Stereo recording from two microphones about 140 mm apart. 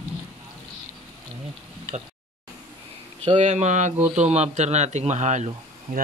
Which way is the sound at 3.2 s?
55° right (ahead or behind).